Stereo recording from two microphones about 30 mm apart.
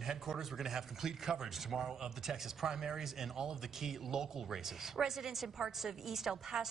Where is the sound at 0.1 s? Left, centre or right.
Centre.